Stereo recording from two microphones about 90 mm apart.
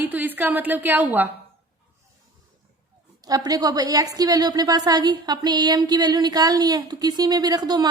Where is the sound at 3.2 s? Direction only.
45° right (ahead or behind).